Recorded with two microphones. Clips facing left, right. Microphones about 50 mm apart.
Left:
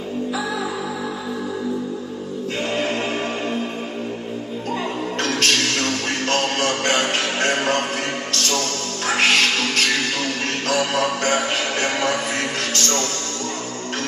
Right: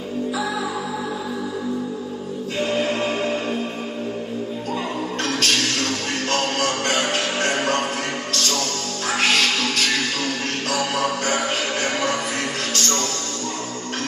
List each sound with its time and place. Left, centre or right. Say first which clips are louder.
5.2 s music: left 2 dB; left